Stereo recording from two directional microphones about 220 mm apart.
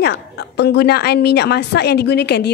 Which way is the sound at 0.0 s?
50° left (ahead or behind).